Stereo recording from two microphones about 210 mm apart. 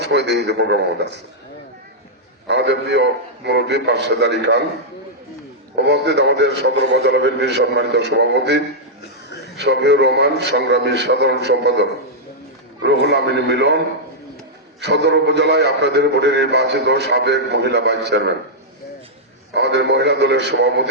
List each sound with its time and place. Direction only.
0.0 s a man's voice: 55° right (ahead or behind)
2.5 s a man's voice: 55° right (ahead or behind)
5.7 s a man's voice: 55° right (ahead or behind)
19.5 s a man's voice: 55° right (ahead or behind)